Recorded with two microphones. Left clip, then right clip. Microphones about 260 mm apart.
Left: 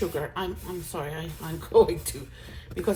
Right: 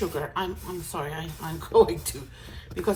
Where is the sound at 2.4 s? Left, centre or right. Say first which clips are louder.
Right 1 dB; right.